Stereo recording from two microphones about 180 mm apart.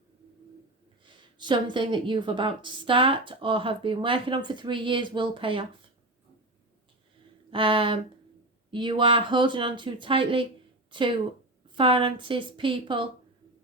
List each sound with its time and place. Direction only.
1.0 s a woman's voice: 25° right (ahead or behind)
7.5 s a woman's voice: 30° right (ahead or behind)